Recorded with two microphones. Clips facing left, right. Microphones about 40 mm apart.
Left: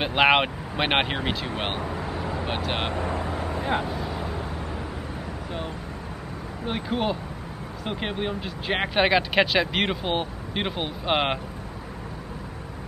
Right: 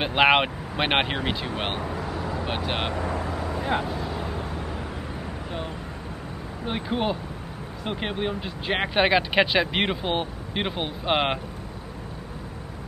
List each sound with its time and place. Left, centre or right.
0.0 s speech: centre
2.0 s vehicle: centre
2.4 s speech: centre
3.0 s vehicle: centre
3.3 s vehicle: left
3.5 s vehicle: centre
6.6 s speech: centre